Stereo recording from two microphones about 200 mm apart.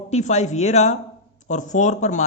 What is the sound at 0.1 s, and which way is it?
A man's voice, 35° left (ahead or behind).